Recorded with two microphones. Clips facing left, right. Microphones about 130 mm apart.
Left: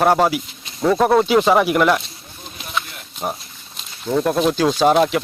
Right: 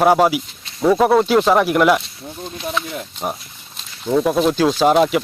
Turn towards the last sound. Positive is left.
turn(degrees=0)  # may be behind; listen again after turning